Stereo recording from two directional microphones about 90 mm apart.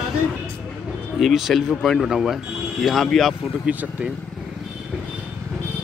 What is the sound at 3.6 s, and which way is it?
Speech, 15° right (ahead or behind).